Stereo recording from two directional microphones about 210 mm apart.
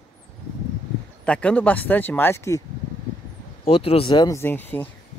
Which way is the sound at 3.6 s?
30° left (ahead or behind).